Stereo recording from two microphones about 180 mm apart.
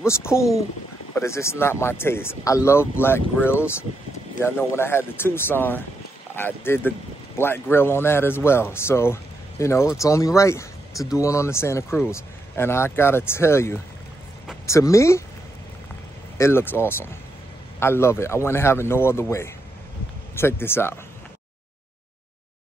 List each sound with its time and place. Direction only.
0.0 s a man's voice: 15° left (ahead or behind)
16.3 s a man's voice: 15° left (ahead or behind)